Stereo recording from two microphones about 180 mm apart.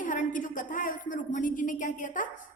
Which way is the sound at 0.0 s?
45° left (ahead or behind).